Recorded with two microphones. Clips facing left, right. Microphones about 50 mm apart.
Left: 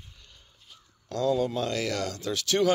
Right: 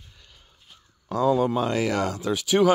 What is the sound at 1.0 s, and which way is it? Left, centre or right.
Speech, centre.